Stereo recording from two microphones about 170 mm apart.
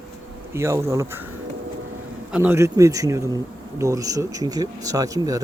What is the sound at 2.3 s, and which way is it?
Speech, 10° right (ahead or behind).